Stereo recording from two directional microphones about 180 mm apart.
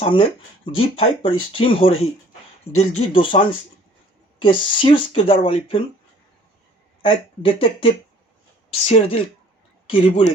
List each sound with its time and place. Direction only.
0.0 s speech: 30° left (ahead or behind)
7.0 s speech: 30° left (ahead or behind)